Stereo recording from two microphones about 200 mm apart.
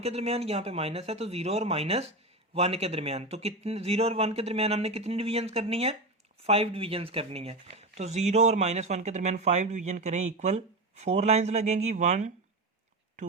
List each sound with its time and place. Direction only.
0.0 s speech: 30° right (ahead or behind)